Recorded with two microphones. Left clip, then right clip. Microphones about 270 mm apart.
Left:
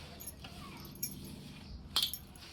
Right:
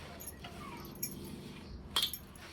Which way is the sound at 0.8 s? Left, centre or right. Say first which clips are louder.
Right 1 dB; centre.